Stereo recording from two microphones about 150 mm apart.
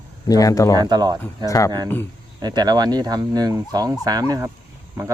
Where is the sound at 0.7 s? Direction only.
25° right (ahead or behind).